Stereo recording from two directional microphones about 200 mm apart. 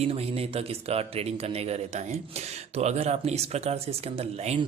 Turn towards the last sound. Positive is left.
turn(degrees=-30)  # may be behind; listen again after turning